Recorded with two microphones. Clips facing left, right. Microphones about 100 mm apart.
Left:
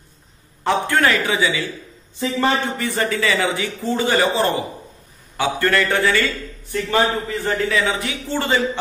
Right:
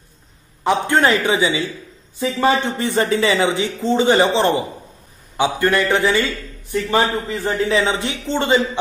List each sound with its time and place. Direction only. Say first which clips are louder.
0.7 s speech: right 2 dB; 20° right (ahead or behind)
2.1 s a man's voice: right 2 dB; 5° right (ahead or behind)
2.6 s speech: right 3 dB; 25° right (ahead or behind)